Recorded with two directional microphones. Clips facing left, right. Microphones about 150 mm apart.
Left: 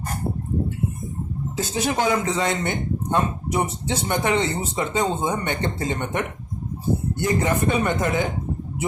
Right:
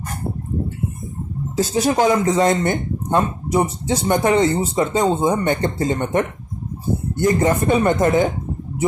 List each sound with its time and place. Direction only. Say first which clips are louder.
1.5 s speech: right 6 dB; 35° right (ahead or behind)